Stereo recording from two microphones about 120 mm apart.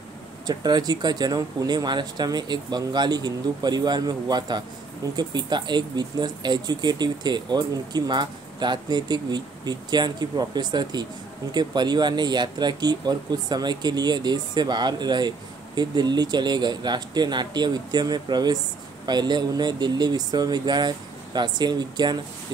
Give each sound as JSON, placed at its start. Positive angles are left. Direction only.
{"t": 0.5, "sound": "speech", "side_deg": -35}